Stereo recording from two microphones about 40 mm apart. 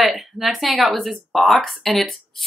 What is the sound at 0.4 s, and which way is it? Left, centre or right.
A woman's voice, centre.